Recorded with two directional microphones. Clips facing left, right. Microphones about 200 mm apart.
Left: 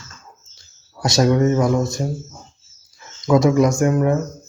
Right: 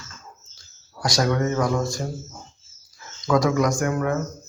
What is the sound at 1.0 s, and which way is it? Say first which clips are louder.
Speech: left 6 dB; 25° left (ahead or behind).